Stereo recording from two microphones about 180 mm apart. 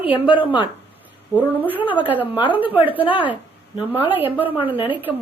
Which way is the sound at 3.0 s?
30° left (ahead or behind).